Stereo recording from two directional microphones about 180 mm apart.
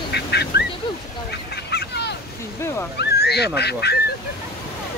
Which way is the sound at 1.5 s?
65° left (ahead or behind).